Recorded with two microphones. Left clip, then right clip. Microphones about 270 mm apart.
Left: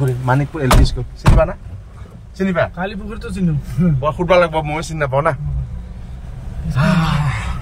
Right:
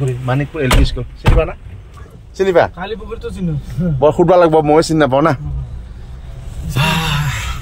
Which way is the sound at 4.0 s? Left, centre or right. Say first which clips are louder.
Right 5 dB; centre.